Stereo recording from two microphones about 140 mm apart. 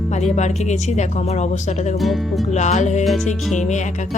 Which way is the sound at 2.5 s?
60° left (ahead or behind).